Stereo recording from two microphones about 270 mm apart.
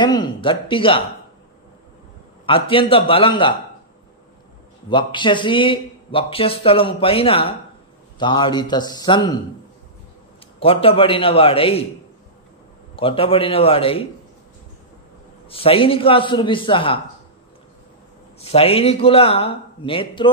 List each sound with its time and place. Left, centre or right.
0.0 s speech: centre
2.4 s speech: centre
4.8 s a man's voice: centre
10.6 s speech: left
12.9 s speech: centre
15.4 s speech: left
18.4 s speech: left